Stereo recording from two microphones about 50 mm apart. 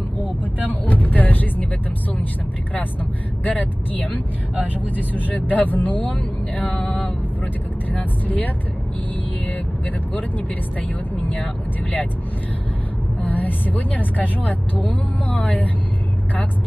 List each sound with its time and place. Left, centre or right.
0.7 s vehicle: left
3.4 s speech: left
5.1 s speech: left
7.9 s speech: left
13.2 s speech: left